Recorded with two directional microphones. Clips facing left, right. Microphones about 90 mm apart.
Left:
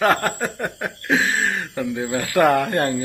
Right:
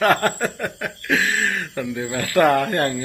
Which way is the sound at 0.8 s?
25° left (ahead or behind).